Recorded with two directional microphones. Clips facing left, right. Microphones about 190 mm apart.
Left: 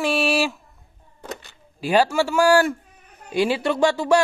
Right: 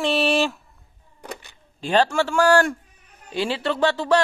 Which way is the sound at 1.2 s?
15° right (ahead or behind).